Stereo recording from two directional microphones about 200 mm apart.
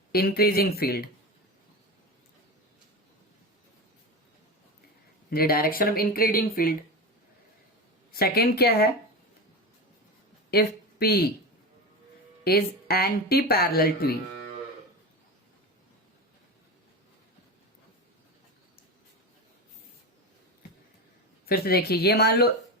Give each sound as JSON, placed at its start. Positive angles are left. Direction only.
{"t": 0.1, "sound": "speech", "side_deg": 50}
{"t": 5.3, "sound": "speech", "side_deg": 50}
{"t": 8.1, "sound": "speech", "side_deg": 50}
{"t": 10.5, "sound": "speech", "side_deg": 50}
{"t": 12.5, "sound": "speech", "side_deg": 50}
{"t": 21.5, "sound": "speech", "side_deg": 50}